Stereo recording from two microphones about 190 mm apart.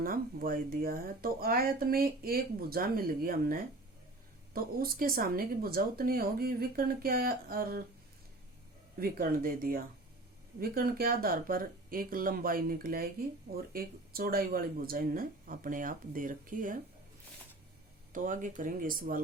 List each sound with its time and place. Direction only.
0.0 s speech: 50° right (ahead or behind)
9.0 s speech: 50° right (ahead or behind)
18.1 s speech: 45° right (ahead or behind)